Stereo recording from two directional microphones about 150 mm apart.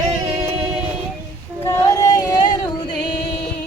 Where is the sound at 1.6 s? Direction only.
15° left (ahead or behind).